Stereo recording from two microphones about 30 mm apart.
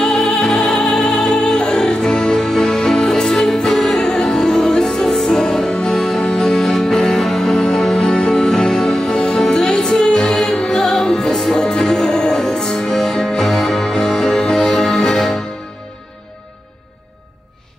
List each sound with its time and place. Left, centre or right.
0.3 s music: centre